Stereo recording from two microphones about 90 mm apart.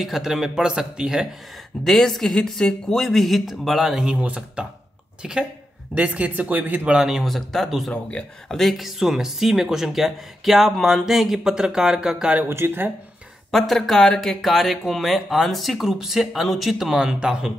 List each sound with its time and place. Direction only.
0.0 s speech: 5° right (ahead or behind)
1.9 s speech: 5° left (ahead or behind); by 7.0 s 20° right (ahead or behind)
7.0 s speech: 5° right (ahead or behind)
12.4 s speech: 25° right (ahead or behind)
13.5 s speech: centre (ahead or behind)